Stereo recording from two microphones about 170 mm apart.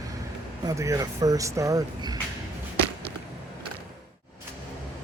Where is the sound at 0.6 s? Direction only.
20° right (ahead or behind).